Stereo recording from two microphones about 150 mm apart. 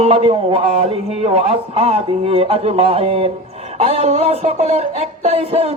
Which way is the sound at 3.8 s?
45° right (ahead or behind).